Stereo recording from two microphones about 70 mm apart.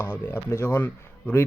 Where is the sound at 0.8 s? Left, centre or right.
Left.